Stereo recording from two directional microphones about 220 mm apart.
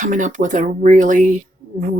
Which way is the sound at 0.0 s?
35° right (ahead or behind).